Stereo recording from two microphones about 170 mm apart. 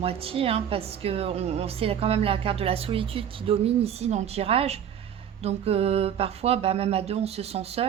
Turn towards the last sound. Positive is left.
turn(degrees=-35)  # may be behind; listen again after turning